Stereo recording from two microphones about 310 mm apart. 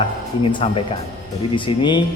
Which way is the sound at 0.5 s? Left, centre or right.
Centre.